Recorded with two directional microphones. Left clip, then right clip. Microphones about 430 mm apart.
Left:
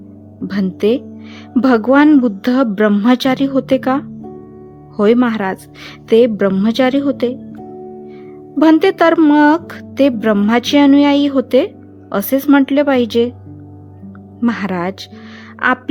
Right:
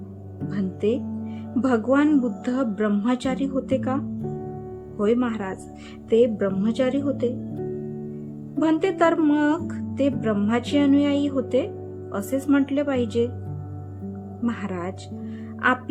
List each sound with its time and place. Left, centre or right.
0.4 s speech: centre
8.5 s speech: centre
14.4 s speech: centre